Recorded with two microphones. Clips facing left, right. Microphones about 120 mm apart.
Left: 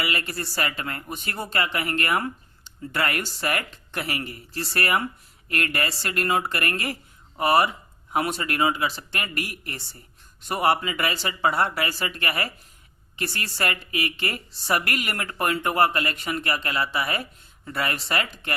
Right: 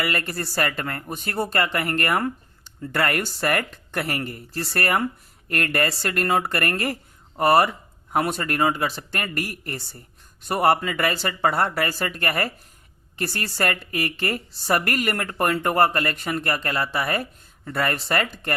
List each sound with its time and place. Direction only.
0.0 s speech: 45° right (ahead or behind)